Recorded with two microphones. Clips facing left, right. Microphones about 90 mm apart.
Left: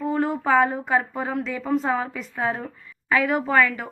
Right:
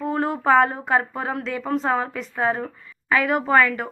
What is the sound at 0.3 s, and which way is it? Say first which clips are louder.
Speech: right 4 dB; centre (ahead or behind).